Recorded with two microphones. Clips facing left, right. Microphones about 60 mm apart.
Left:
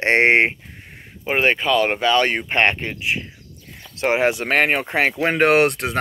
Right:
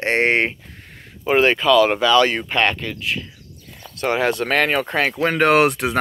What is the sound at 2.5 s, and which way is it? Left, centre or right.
Speech, left.